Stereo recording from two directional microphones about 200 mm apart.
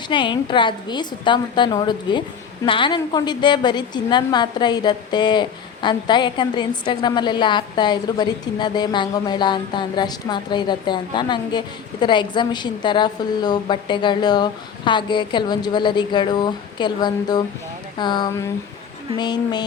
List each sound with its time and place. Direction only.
0.1 s a woman's voice: 25° left (ahead or behind)